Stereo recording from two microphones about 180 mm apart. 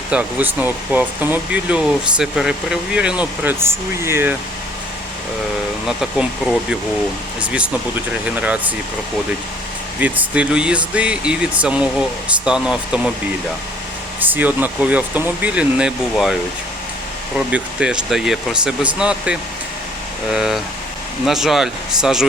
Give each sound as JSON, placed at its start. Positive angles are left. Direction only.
{"t": 0.1, "sound": "speech", "side_deg": -10}
{"t": 6.0, "sound": "speech", "side_deg": -5}
{"t": 10.0, "sound": "speech", "side_deg": -10}
{"t": 14.2, "sound": "speech", "side_deg": -10}
{"t": 17.5, "sound": "speech", "side_deg": -5}